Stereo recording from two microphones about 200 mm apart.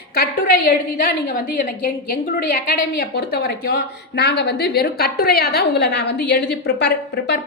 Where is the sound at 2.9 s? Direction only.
50° left (ahead or behind).